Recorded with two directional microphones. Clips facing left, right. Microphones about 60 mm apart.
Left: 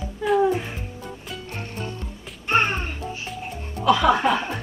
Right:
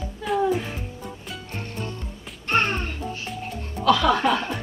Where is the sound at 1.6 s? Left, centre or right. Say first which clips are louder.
Right 1 dB; centre.